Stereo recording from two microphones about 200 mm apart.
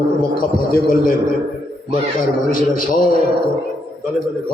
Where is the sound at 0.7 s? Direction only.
45° left (ahead or behind).